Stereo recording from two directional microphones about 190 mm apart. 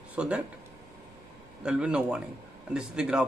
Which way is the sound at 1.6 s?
5° right (ahead or behind).